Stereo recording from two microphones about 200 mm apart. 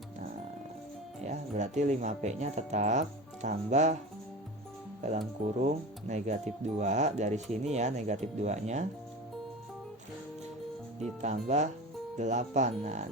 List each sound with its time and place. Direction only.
1.2 s speech: 35° right (ahead or behind)
5.6 s speech: 35° right (ahead or behind)
11.2 s speech: 35° right (ahead or behind)